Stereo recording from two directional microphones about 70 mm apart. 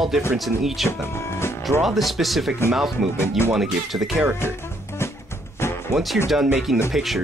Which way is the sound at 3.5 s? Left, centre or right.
Centre.